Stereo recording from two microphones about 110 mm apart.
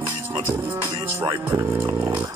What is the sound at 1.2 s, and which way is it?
Speech, 45° right (ahead or behind).